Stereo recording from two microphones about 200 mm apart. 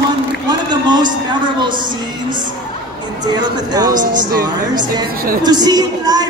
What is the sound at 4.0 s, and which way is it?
Speech, 40° right (ahead or behind).